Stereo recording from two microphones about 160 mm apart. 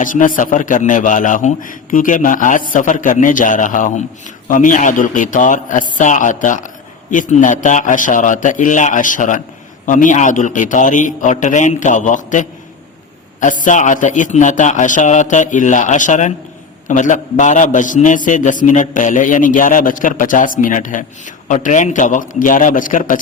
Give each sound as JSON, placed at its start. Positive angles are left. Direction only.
{"t": 0.0, "sound": "a man's voice", "side_deg": 55}